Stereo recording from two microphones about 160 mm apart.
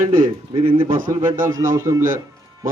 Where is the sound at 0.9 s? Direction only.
60° right (ahead or behind).